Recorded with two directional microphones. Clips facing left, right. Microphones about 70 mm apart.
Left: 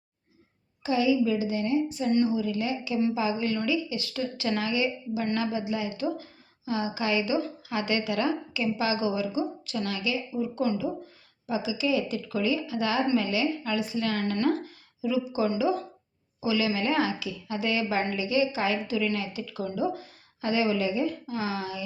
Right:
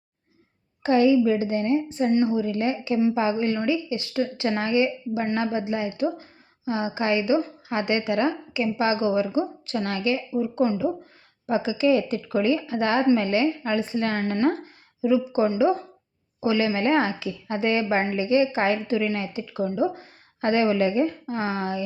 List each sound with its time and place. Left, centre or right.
0.8 s a woman's voice: right
16.4 s a woman's voice: right
20.4 s a woman's voice: right